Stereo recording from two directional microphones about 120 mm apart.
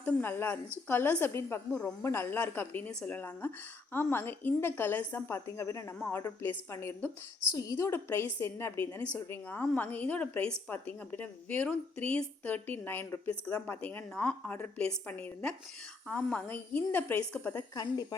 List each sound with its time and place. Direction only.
0.0 s a woman's voice: 15° left (ahead or behind)
7.5 s a woman's voice: 30° left (ahead or behind)